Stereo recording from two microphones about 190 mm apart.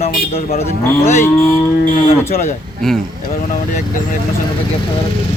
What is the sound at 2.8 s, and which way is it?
Cattle, centre (ahead or behind).